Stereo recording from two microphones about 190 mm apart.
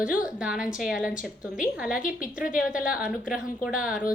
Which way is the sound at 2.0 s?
45° left (ahead or behind).